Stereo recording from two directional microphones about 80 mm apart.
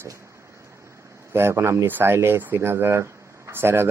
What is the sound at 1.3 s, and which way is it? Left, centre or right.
Speech, right.